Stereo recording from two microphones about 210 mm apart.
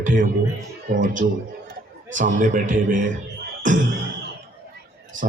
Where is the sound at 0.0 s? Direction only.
40° right (ahead or behind).